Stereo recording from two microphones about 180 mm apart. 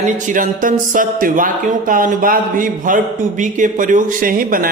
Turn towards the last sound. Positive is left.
turn(degrees=-50)  # may be behind; listen again after turning